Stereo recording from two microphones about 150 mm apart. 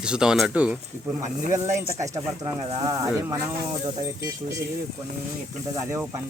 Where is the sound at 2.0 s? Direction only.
20° right (ahead or behind).